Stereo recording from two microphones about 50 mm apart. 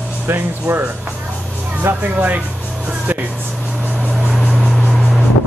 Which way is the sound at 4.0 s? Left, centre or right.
Centre.